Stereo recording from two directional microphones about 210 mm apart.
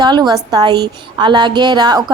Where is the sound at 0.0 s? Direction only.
20° right (ahead or behind).